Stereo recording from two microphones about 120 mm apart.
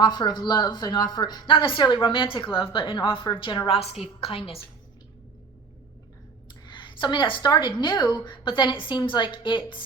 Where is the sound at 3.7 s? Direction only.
55° left (ahead or behind).